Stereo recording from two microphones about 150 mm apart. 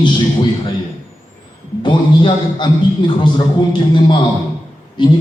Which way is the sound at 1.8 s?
30° left (ahead or behind).